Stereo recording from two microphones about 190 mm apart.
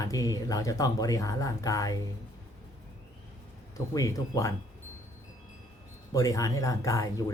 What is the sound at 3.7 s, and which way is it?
Speech, 15° left (ahead or behind).